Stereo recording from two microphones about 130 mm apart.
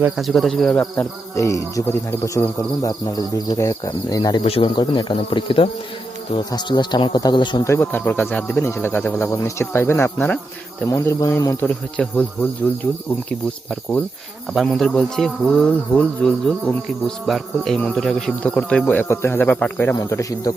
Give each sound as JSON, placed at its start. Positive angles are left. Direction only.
{"t": 0.2, "sound": "cricket", "side_deg": 0}
{"t": 1.4, "sound": "speech", "side_deg": 25}
{"t": 4.4, "sound": "speech", "side_deg": 45}
{"t": 7.6, "sound": "speech", "side_deg": 20}
{"t": 11.6, "sound": "speech", "side_deg": 10}
{"t": 14.5, "sound": "cricket", "side_deg": 0}
{"t": 17.7, "sound": "speech", "side_deg": 5}
{"t": 20.0, "sound": "speech", "side_deg": 25}